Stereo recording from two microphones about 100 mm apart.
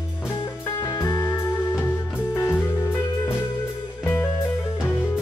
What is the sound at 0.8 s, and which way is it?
Music, 40° left (ahead or behind).